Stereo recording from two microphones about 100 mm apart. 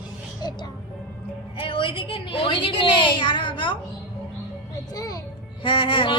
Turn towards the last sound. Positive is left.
turn(degrees=55)  # may be behind; listen again after turning